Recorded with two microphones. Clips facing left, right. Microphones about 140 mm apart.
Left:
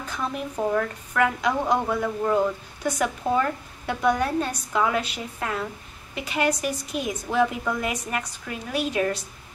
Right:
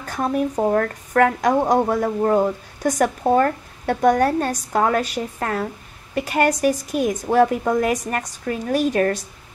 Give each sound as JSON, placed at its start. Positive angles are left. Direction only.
{"t": 0.0, "sound": "a woman's voice", "side_deg": -45}